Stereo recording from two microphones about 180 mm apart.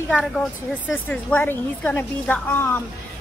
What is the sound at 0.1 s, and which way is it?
A woman's voice, 5° left (ahead or behind).